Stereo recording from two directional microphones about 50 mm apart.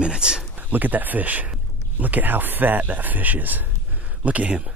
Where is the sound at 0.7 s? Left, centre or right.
Right.